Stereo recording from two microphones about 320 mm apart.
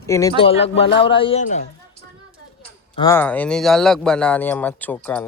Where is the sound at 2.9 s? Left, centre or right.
Centre.